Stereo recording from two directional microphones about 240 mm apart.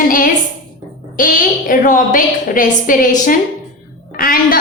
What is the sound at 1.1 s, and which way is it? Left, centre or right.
A woman's voice, left.